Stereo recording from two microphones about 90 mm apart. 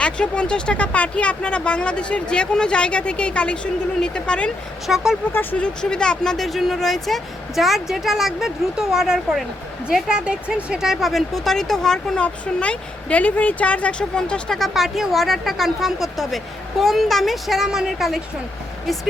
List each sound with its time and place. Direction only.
0.0 s speech: 10° left (ahead or behind)
4.9 s speech: 5° right (ahead or behind)
5.3 s speech: 20° left (ahead or behind); by 18.2 s 5° right (ahead or behind)